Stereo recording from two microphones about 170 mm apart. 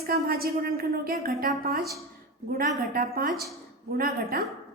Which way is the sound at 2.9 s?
55° right (ahead or behind).